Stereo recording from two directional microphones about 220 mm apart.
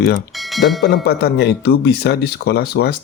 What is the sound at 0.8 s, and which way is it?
Speech, 45° left (ahead or behind).